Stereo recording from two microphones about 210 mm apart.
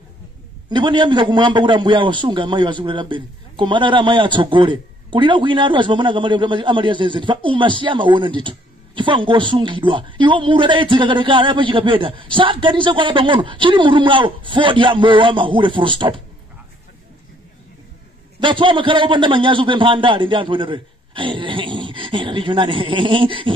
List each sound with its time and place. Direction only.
0.7 s a man's voice: 25° right (ahead or behind)
18.4 s a man's voice: 25° right (ahead or behind)